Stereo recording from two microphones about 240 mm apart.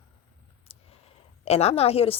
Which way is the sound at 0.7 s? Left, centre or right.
Left.